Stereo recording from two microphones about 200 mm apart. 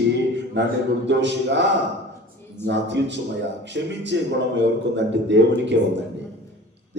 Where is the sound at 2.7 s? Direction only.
60° right (ahead or behind).